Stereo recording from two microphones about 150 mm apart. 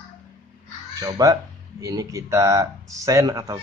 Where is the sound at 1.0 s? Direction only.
25° right (ahead or behind).